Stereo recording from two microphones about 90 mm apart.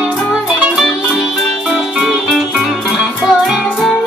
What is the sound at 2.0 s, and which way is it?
Music, centre (ahead or behind).